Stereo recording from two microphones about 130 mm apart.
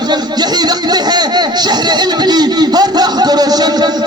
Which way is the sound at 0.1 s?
30° right (ahead or behind).